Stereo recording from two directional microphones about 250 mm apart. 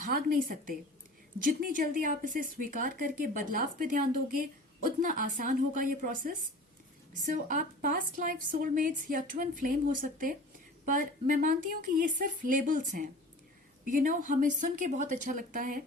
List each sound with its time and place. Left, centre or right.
0.0 s a woman's voice: right